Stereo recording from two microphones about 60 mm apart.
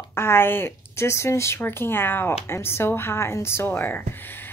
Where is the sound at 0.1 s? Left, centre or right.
Left.